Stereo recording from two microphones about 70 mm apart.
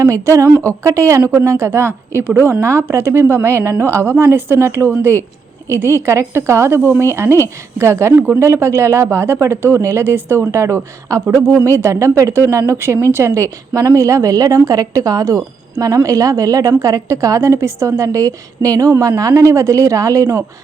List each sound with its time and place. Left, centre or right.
0.0 s a woman's voice: right
1.2 s speech: right
2.5 s a woman's voice: right